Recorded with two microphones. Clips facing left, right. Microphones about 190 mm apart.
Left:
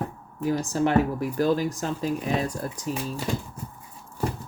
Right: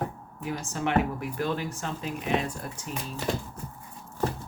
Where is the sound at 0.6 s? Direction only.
35° left (ahead or behind).